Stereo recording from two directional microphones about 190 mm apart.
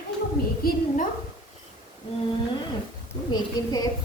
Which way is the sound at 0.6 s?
50° left (ahead or behind).